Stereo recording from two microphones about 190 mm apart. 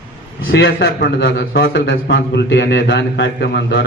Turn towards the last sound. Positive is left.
turn(degrees=65)  # may be behind; listen again after turning